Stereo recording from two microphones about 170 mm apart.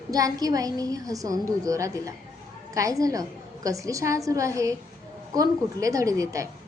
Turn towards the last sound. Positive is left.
turn(degrees=-20)  # may be behind; listen again after turning